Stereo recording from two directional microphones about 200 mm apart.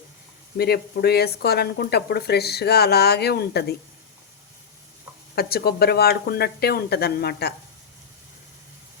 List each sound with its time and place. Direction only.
0.5 s speech: 50° left (ahead or behind)
5.3 s speech: 50° left (ahead or behind)